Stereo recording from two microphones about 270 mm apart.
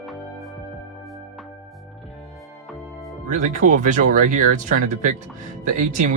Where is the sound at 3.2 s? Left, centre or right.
Right.